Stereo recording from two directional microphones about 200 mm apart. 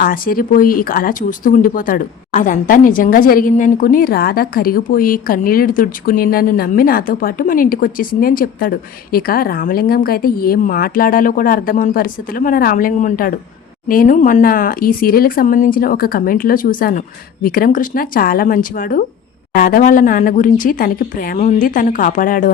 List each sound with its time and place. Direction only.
0.0 s speech: 45° left (ahead or behind)